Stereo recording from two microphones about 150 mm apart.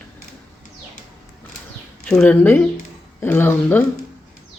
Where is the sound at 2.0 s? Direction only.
5° left (ahead or behind).